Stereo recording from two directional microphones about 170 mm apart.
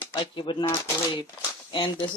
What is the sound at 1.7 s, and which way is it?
Speech, 30° left (ahead or behind).